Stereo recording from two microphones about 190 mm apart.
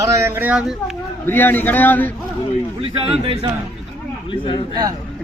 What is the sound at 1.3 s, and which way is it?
Speech, 10° left (ahead or behind).